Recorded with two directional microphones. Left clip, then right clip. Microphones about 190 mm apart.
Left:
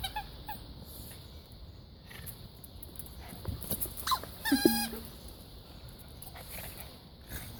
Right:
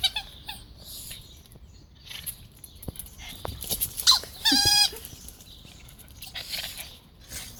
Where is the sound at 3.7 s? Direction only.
10° right (ahead or behind).